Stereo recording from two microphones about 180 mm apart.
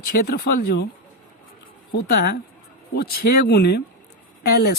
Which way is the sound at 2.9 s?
60° left (ahead or behind).